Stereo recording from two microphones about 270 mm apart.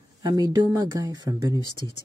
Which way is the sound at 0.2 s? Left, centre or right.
Centre.